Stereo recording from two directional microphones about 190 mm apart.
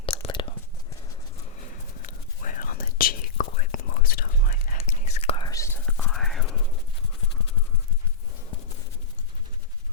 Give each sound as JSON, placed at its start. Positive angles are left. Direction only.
{"t": 0.0, "sound": "whispering", "side_deg": 25}
{"t": 2.0, "sound": "whispering", "side_deg": 40}
{"t": 4.8, "sound": "whispering", "side_deg": 35}
{"t": 6.1, "sound": "whispering", "side_deg": 0}